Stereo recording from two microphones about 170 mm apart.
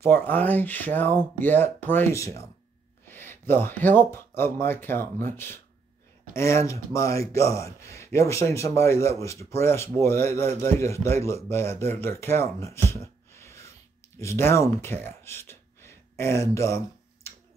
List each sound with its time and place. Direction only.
0.0 s a man's voice: 10° left (ahead or behind)